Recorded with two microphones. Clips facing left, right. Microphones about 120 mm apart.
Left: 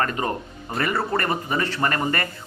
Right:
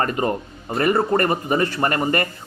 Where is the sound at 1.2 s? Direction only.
40° right (ahead or behind).